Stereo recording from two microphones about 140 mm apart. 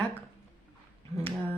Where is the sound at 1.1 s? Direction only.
50° right (ahead or behind).